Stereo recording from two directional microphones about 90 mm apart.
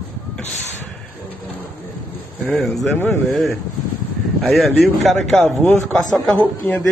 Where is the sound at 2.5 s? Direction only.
Centre (ahead or behind).